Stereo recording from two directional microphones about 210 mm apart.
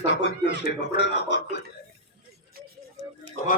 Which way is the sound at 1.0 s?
55° left (ahead or behind).